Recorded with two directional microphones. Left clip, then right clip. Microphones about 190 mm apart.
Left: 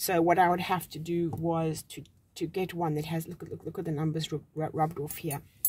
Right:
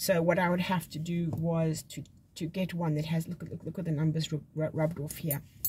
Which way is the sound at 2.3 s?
40° left (ahead or behind).